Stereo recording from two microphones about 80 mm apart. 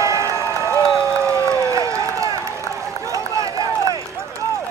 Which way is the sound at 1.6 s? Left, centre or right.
Right.